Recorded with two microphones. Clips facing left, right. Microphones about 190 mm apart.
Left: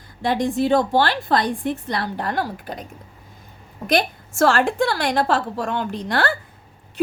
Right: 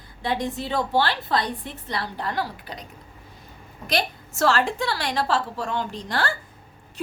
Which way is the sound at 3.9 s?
50° left (ahead or behind).